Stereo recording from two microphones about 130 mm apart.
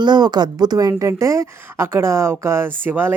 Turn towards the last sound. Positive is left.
turn(degrees=-15)  # may be behind; listen again after turning